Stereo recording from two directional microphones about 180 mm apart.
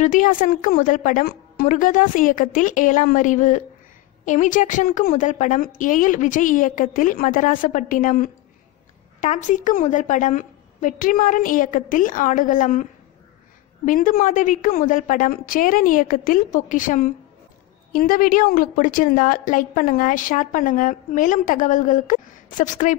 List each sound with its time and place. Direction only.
0.0 s a woman's voice: 45° left (ahead or behind)
13.8 s a woman's voice: 50° left (ahead or behind)